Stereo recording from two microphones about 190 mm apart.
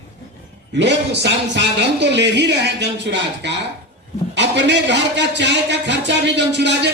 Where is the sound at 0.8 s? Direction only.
65° right (ahead or behind).